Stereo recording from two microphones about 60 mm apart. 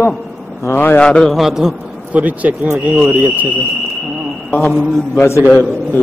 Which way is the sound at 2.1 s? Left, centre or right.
Right.